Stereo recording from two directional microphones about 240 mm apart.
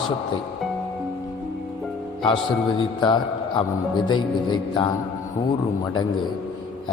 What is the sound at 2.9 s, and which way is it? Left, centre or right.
A man's voice, centre.